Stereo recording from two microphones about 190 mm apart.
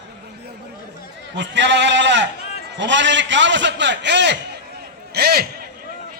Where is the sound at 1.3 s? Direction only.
70° right (ahead or behind).